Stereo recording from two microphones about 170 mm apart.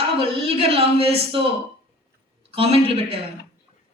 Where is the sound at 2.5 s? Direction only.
35° right (ahead or behind).